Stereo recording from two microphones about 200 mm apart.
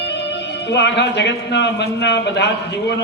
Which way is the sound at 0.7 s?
60° left (ahead or behind).